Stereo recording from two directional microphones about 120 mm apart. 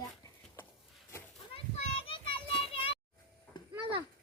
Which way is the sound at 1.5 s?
50° left (ahead or behind).